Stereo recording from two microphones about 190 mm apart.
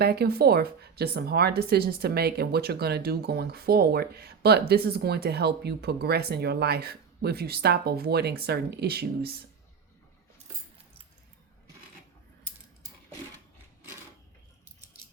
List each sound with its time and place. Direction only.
0.0 s speech: 55° right (ahead or behind)